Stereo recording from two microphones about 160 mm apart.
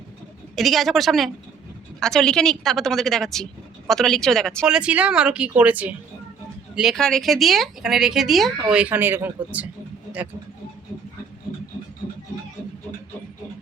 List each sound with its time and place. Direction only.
0.5 s a woman's voice: centre (ahead or behind)